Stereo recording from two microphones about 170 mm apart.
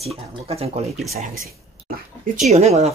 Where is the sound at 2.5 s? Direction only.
40° right (ahead or behind).